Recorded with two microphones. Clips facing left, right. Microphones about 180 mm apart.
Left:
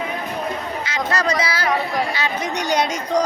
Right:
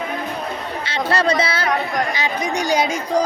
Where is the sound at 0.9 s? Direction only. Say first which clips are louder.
Right 4 dB; 30° right (ahead or behind).